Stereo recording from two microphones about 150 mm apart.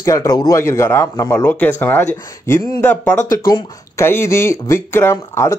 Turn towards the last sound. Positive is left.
turn(degrees=20)  # may be behind; listen again after turning